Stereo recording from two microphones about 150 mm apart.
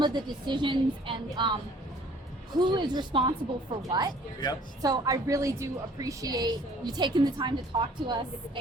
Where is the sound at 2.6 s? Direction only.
30° right (ahead or behind).